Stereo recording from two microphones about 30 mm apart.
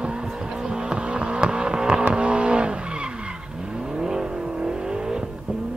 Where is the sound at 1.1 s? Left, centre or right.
Right.